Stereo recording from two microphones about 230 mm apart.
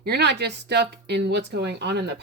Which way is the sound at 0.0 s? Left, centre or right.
Right.